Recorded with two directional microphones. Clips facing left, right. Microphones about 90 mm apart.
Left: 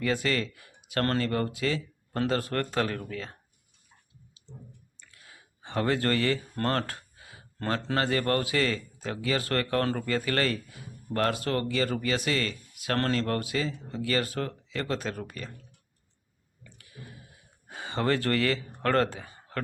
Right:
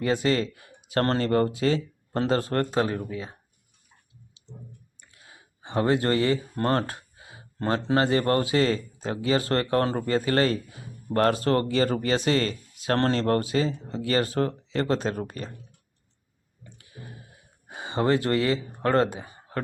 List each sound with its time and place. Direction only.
0.0 s speech: 25° right (ahead or behind)
4.4 s clicking: 20° right (ahead or behind)
4.9 s speech: 25° right (ahead or behind)
16.6 s a sound: 25° right (ahead or behind)
17.7 s speech: 20° right (ahead or behind)